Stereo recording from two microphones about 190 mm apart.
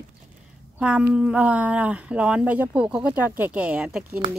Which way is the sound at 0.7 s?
5° right (ahead or behind).